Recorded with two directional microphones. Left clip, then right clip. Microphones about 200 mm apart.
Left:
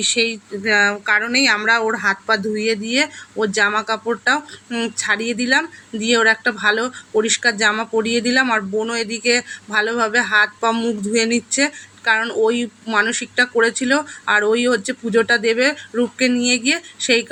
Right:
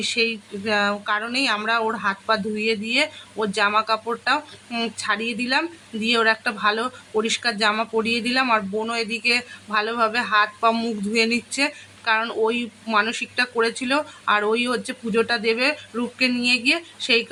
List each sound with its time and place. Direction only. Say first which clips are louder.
0.0 s speech: left 4 dB; 5° left (ahead or behind)